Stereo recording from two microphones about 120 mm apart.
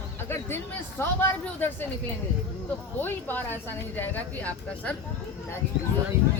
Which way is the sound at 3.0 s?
15° left (ahead or behind).